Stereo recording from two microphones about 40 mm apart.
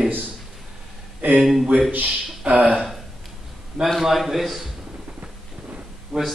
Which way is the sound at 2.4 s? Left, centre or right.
Right.